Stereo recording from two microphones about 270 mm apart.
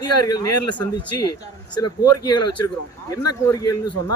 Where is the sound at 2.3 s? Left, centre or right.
Left.